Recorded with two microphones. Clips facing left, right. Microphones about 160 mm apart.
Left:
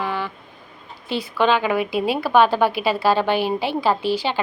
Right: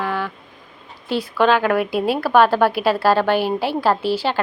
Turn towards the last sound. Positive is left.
turn(degrees=-5)  # may be behind; listen again after turning